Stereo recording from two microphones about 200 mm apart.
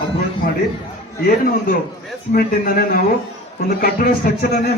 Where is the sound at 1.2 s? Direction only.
45° left (ahead or behind).